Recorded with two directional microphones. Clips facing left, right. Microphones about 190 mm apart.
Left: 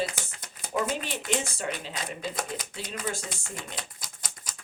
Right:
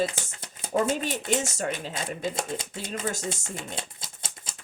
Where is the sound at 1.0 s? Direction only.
45° right (ahead or behind).